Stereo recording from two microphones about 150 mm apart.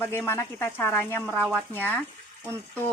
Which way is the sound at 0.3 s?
15° left (ahead or behind).